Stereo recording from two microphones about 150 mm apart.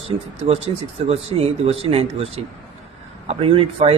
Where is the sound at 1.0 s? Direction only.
40° right (ahead or behind).